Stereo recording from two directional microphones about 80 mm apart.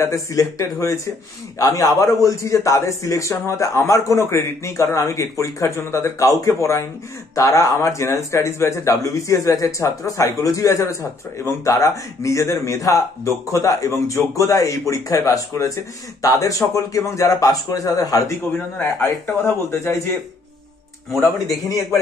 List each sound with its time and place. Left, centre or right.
0.0 s speech: left
18.5 s speech: left